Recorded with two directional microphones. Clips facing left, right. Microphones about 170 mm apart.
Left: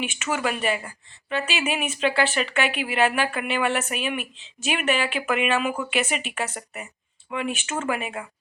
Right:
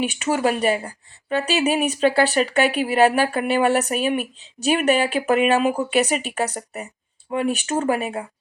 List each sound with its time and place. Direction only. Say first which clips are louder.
0.0 s a woman's voice: right 6 dB; 35° right (ahead or behind)